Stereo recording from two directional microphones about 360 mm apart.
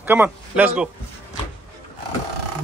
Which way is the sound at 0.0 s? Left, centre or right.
Centre.